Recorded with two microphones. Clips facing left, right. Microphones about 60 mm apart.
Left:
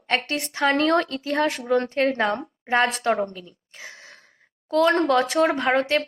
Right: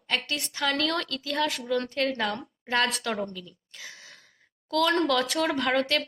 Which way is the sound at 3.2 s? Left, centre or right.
Left.